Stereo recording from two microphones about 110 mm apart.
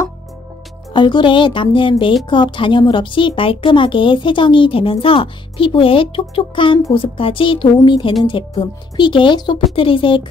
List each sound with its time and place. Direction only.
0.9 s speech: 45° left (ahead or behind)